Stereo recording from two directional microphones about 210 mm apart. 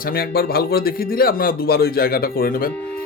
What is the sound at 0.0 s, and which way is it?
Speech, 45° left (ahead or behind).